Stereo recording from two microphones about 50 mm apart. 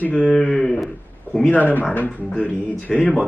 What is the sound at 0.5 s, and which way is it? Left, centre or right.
Cattle, centre.